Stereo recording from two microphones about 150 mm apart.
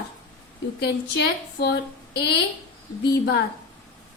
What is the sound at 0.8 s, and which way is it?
Speech, 90° left.